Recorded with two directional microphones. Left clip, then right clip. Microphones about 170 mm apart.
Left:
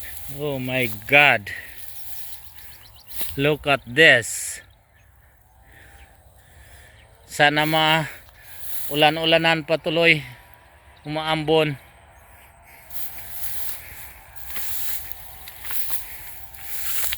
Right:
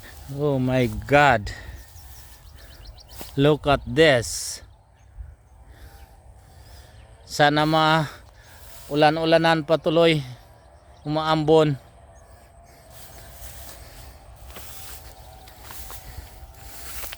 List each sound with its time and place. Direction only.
0.3 s speech: 40° right (ahead or behind)
1.0 s speech: 25° right (ahead or behind)
3.3 s a man's voice: 25° right (ahead or behind)
7.3 s a man's voice: 10° right (ahead or behind)
13.4 s a sound: 15° left (ahead or behind)
16.8 s a sound: centre (ahead or behind)